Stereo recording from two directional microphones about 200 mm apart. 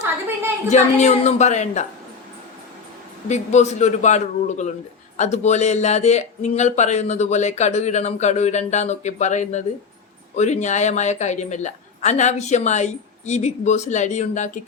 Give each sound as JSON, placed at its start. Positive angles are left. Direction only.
{"t": 0.7, "sound": "speech", "side_deg": 35}
{"t": 3.2, "sound": "speech", "side_deg": 35}